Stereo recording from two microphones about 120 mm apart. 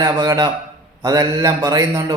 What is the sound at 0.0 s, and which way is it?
A man's voice, 30° right (ahead or behind).